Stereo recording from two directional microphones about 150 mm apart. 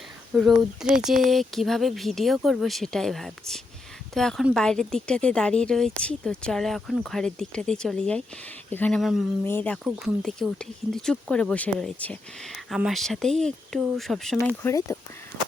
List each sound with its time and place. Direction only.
0.3 s speech: 5° right (ahead or behind)
9.0 s speech: centre (ahead or behind)
9.4 s speech: 15° left (ahead or behind)
10.2 s speech: 5° left (ahead or behind)
12.7 s speech: centre (ahead or behind)
14.6 s speech: 20° left (ahead or behind)